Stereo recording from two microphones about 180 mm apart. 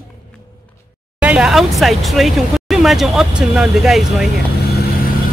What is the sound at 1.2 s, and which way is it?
Speech, 5° right (ahead or behind).